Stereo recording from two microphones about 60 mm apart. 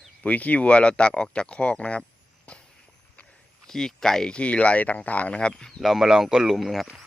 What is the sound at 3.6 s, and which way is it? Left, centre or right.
Speech, centre.